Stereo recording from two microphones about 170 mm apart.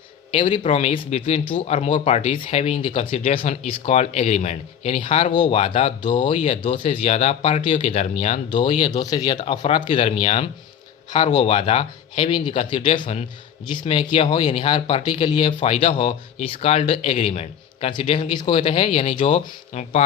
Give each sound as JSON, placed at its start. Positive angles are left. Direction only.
{"t": 0.3, "sound": "speech", "side_deg": 30}
{"t": 0.6, "sound": "speech", "side_deg": 40}
{"t": 6.3, "sound": "speech", "side_deg": 45}
{"t": 6.6, "sound": "speech", "side_deg": 30}